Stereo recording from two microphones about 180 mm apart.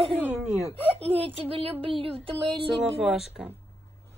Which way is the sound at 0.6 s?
30° right (ahead or behind).